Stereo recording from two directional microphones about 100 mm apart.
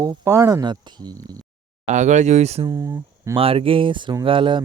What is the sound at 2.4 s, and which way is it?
Speech, 90° right.